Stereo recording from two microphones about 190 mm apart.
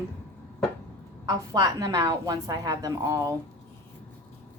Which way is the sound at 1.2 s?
20° right (ahead or behind).